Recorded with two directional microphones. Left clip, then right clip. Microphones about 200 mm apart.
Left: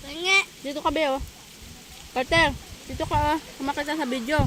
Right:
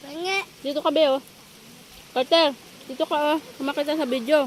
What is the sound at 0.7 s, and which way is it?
Speech, 15° left (ahead or behind).